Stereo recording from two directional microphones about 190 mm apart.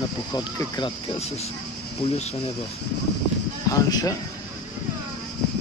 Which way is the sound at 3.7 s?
20° left (ahead or behind).